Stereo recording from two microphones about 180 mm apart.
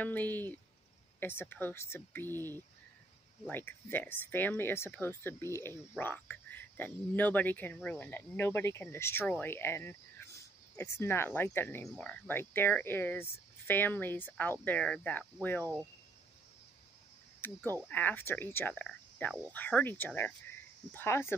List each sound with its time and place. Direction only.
0.0 s speech: 10° left (ahead or behind)
17.8 s speech: 10° left (ahead or behind)